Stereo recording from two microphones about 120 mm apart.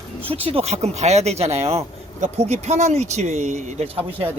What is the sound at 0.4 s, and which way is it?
Speech, 60° right (ahead or behind).